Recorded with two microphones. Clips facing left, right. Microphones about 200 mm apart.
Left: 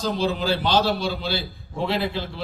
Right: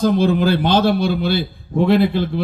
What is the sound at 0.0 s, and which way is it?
A man's voice, 55° right (ahead or behind).